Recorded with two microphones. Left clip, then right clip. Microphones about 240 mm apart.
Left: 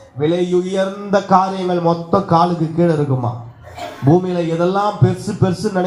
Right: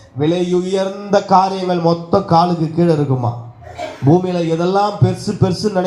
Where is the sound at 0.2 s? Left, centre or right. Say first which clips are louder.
Even; right.